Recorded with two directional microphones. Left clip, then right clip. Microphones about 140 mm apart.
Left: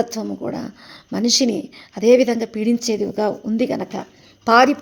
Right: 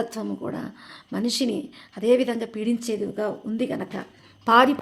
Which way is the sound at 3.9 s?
25° left (ahead or behind).